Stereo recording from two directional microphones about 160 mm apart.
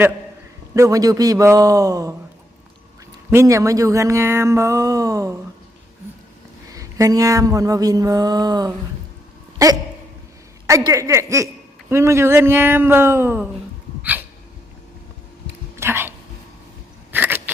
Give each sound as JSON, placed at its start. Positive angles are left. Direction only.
{"t": 0.7, "sound": "speech", "side_deg": -20}
{"t": 3.2, "sound": "speech", "side_deg": -20}
{"t": 6.7, "sound": "speech", "side_deg": -20}
{"t": 9.6, "sound": "a sound", "side_deg": -20}
{"t": 10.7, "sound": "speech", "side_deg": -20}
{"t": 15.7, "sound": "a sound", "side_deg": -15}